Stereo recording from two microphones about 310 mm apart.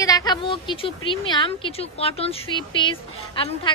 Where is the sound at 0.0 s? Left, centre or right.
Centre.